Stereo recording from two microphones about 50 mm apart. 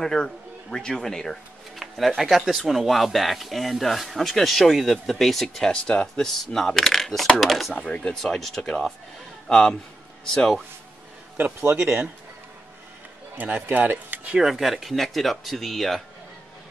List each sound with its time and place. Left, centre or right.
0.0 s speech: centre
5.7 s speech: centre
6.3 s speech: centre
7.8 s speech: left
8.1 s speech: centre
13.4 s speech: right
14.4 s speech: centre